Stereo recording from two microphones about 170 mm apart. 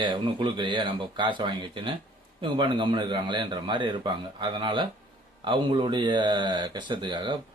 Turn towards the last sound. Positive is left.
turn(degrees=-25)  # may be behind; listen again after turning